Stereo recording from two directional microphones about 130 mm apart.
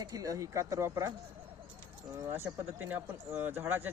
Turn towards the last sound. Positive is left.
turn(degrees=-15)  # may be behind; listen again after turning